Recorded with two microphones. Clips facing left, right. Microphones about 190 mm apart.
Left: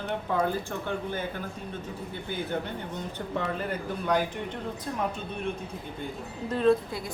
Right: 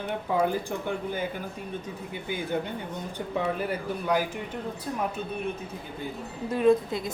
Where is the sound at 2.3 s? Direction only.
10° right (ahead or behind).